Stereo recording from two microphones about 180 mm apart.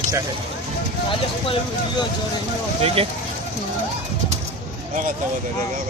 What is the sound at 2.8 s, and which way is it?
Speech, 35° right (ahead or behind).